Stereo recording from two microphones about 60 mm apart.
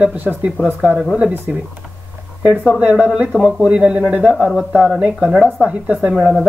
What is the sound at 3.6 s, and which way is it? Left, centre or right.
Speech, right.